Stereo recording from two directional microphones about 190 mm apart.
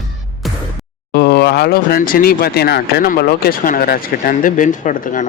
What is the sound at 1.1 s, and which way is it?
Speech, 55° left (ahead or behind).